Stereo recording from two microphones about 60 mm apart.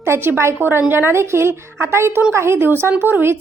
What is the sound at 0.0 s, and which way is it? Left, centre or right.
A woman's voice, right.